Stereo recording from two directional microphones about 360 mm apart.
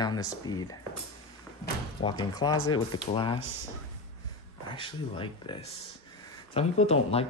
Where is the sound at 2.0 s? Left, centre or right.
Centre.